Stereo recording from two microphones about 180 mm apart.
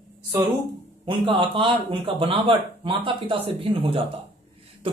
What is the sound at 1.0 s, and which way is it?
A man's voice, 30° right (ahead or behind).